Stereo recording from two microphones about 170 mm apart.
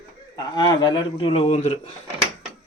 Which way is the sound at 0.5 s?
25° left (ahead or behind).